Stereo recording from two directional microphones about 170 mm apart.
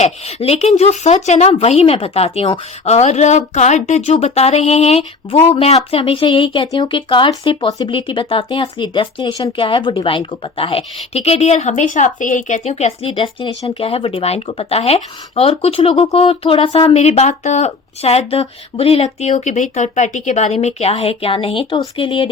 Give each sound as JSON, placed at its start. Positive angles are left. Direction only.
{"t": 0.0, "sound": "speech", "side_deg": 40}